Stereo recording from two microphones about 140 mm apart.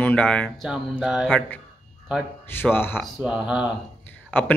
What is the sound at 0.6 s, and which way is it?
Speech, centre (ahead or behind).